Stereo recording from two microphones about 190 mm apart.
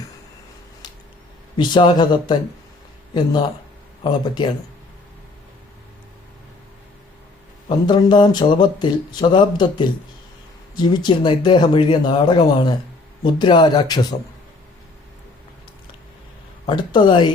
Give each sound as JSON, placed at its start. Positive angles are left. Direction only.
{"t": 1.5, "sound": "speech", "side_deg": 25}
{"t": 4.0, "sound": "speech", "side_deg": 25}
{"t": 7.7, "sound": "speech", "side_deg": 25}
{"t": 16.6, "sound": "speech", "side_deg": 25}